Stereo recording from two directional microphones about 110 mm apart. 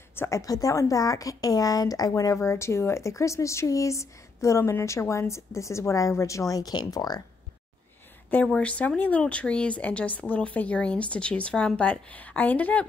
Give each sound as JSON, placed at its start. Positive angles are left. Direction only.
{"t": 0.1, "sound": "speech", "side_deg": 25}
{"t": 8.5, "sound": "speech", "side_deg": 10}